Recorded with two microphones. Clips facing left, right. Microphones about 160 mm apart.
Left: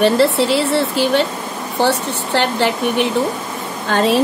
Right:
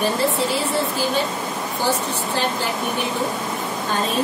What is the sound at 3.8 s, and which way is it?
Speech, 90° left.